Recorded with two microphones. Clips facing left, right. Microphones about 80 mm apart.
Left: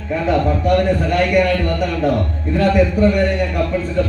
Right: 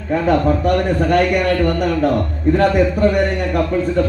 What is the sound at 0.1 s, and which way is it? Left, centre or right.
Speech, right.